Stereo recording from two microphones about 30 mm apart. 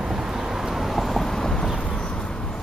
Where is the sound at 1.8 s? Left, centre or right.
Left.